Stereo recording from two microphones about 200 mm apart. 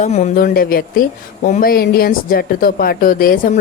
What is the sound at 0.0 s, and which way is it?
Speech, 35° left (ahead or behind).